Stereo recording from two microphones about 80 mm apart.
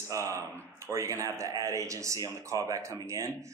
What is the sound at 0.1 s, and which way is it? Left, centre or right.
Speech, right.